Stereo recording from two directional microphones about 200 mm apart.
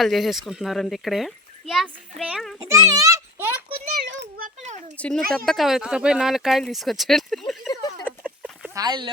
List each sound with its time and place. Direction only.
0.0 s a child's voice: centre (ahead or behind)
2.6 s a child's voice: 15° right (ahead or behind)
4.0 s a child's voice: 50° right (ahead or behind)
4.9 s a child's voice: 5° left (ahead or behind)
8.0 s a sound: 5° right (ahead or behind)
8.7 s speech: 20° right (ahead or behind)